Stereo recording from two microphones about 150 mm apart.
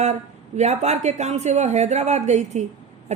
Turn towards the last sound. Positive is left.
turn(degrees=-50)  # may be behind; listen again after turning